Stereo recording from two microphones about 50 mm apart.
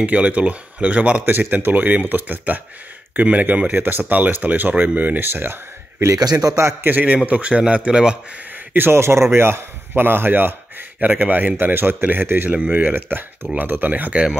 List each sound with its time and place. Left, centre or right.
0.0 s speech: right
1.2 s a man's voice: right
6.8 s speech: right
7.2 s speech: right
8.7 s a man's voice: right
9.0 s a man's voice: right
11.0 s a man's voice: right
12.4 s speech: right
12.8 s a man's voice: right